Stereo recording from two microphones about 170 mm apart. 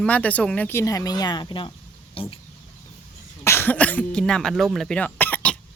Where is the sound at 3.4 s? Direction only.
15° left (ahead or behind).